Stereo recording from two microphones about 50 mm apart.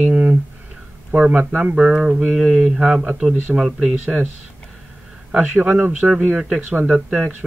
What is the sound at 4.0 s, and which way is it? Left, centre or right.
Speech, right.